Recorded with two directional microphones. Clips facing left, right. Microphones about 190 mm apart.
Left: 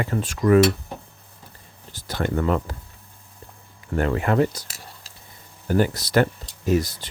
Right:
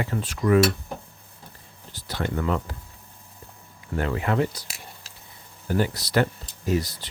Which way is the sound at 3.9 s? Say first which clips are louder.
Left 4 dB; 50° left (ahead or behind).